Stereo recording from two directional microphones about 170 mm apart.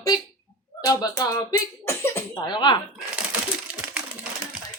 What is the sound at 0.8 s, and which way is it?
Speech, 20° left (ahead or behind).